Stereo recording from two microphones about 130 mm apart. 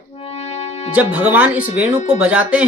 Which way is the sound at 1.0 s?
15° right (ahead or behind).